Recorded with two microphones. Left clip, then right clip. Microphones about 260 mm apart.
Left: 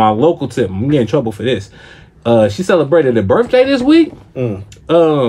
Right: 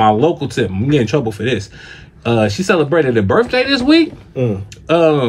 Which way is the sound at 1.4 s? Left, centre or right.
Centre.